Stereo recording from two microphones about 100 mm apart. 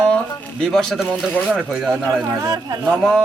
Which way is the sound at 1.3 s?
15° left (ahead or behind).